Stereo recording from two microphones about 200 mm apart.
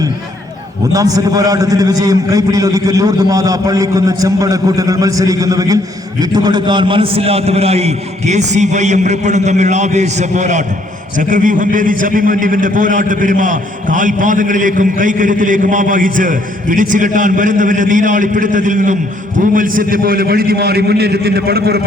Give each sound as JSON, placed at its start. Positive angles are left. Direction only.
{"t": 0.9, "sound": "a man's voice", "side_deg": -20}